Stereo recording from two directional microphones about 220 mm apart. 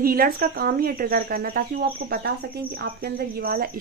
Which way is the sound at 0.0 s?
40° right (ahead or behind).